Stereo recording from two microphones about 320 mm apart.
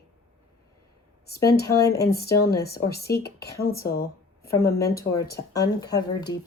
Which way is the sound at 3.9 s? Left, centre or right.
Left.